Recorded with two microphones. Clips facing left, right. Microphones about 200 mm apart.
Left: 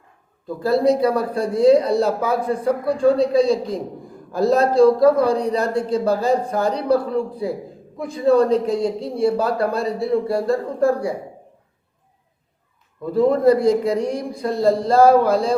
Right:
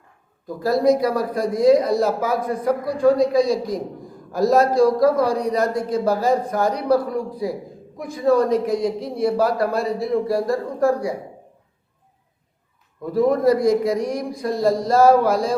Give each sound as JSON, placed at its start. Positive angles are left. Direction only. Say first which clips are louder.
{"t": 0.6, "sound": "a man's voice", "louder": "left 1 dB", "side_deg": 30}
{"t": 13.1, "sound": "a man's voice", "louder": "left 2 dB", "side_deg": 30}